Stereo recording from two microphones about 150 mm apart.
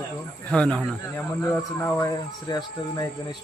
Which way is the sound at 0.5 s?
5° left (ahead or behind).